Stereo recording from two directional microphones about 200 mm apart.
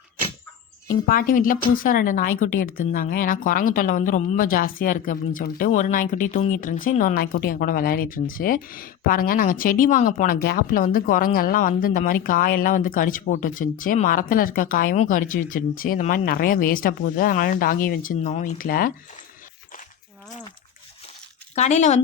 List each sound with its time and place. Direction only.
0.9 s speech: 45° left (ahead or behind)
21.5 s speech: 35° left (ahead or behind)